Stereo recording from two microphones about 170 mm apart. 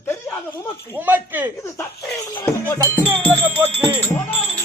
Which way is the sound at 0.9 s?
10° right (ahead or behind).